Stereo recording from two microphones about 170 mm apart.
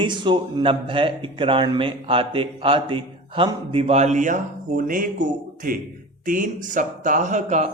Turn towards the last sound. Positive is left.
turn(degrees=-45)  # may be behind; listen again after turning